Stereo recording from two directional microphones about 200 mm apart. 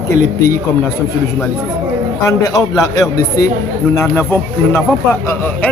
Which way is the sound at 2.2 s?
15° left (ahead or behind).